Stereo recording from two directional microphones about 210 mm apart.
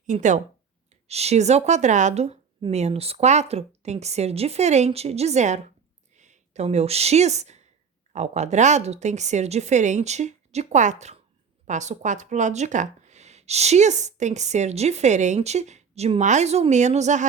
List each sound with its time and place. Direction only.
0.1 s speech: 35° right (ahead or behind)